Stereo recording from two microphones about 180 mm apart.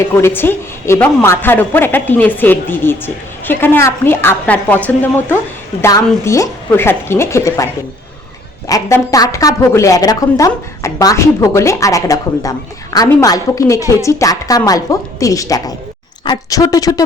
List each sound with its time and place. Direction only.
0.1 s a woman's voice: 15° left (ahead or behind)
5.8 s a woman's voice: 15° left (ahead or behind)